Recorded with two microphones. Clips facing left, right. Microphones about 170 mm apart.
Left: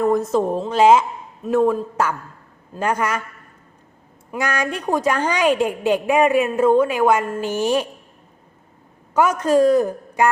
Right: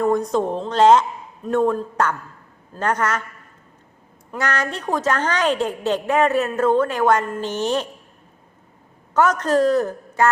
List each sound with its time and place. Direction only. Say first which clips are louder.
0.0 s a woman's voice: left 1 dB; centre (ahead or behind)
4.3 s a woman's voice: left 1 dB; 10° left (ahead or behind)
9.1 s a woman's voice: left 2 dB; 10° left (ahead or behind)